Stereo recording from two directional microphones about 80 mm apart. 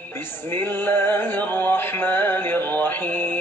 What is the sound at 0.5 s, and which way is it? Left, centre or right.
Music, left.